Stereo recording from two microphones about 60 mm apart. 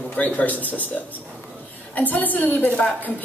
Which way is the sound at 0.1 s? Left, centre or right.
Left.